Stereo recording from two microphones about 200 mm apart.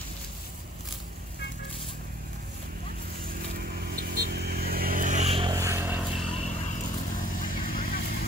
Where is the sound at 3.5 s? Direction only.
50° right (ahead or behind); by 5.5 s 30° right (ahead or behind).